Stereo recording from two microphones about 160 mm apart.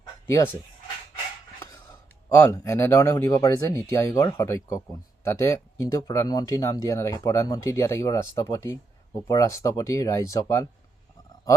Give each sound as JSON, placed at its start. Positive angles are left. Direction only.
{"t": 0.3, "sound": "speech", "side_deg": 15}
{"t": 2.5, "sound": "speech", "side_deg": 15}